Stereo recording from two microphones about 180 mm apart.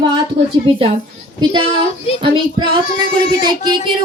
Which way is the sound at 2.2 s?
25° right (ahead or behind).